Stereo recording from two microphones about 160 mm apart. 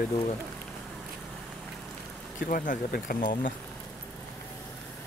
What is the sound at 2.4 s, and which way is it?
Speech, 55° left (ahead or behind).